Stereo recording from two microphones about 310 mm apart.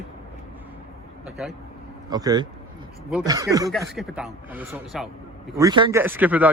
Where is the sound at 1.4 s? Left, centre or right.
Centre.